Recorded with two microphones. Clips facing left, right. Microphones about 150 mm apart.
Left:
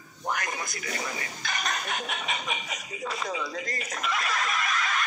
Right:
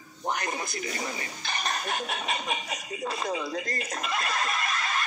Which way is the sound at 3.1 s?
35° right (ahead or behind).